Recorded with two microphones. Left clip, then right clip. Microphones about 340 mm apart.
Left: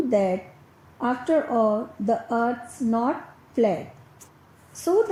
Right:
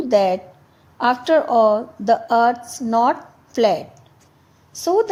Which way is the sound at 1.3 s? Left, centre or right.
Right.